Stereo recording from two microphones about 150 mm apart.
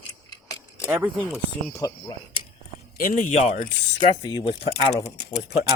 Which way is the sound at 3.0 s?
60° left (ahead or behind).